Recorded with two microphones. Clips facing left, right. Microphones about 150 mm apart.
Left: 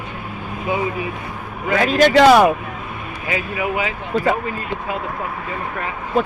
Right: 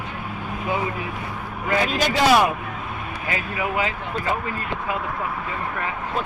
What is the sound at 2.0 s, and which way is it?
Speech, 55° left (ahead or behind).